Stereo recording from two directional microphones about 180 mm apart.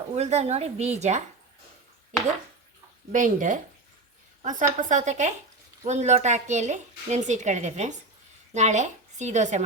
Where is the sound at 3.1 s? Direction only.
45° right (ahead or behind).